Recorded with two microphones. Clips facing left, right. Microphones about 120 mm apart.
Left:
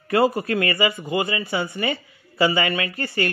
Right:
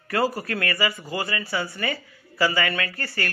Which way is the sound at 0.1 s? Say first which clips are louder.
Left 5 dB; 20° left (ahead or behind).